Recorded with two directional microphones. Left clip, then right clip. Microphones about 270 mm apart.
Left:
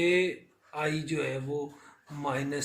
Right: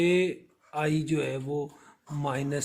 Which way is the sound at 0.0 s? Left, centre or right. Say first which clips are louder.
Right 1 dB; right.